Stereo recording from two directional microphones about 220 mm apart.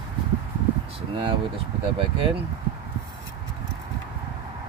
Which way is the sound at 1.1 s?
25° right (ahead or behind).